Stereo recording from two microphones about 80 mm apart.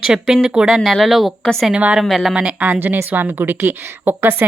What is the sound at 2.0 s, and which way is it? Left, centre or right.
Speech, centre.